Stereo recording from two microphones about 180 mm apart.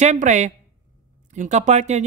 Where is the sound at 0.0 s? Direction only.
40° right (ahead or behind).